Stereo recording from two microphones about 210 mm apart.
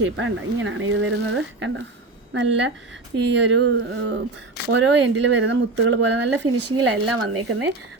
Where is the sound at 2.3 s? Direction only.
60° right (ahead or behind).